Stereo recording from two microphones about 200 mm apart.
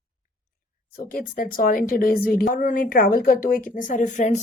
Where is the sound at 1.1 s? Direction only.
45° left (ahead or behind).